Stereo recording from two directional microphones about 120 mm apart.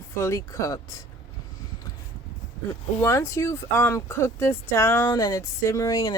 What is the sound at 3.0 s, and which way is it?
Speech, 20° left (ahead or behind).